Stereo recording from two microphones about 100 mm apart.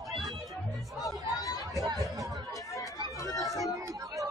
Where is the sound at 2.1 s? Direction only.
35° right (ahead or behind).